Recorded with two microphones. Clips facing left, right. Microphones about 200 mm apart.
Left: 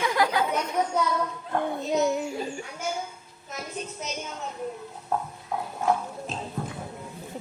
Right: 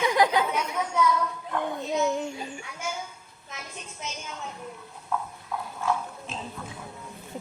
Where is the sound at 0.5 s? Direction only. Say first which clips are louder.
Left 2 dB; 40° left (ahead or behind).